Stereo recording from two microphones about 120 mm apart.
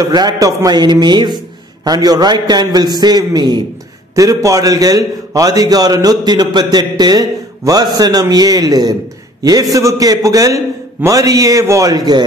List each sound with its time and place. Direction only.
0.0 s a man's voice: 35° right (ahead or behind)